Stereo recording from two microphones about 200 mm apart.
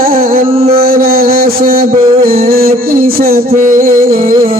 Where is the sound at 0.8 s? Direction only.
45° right (ahead or behind).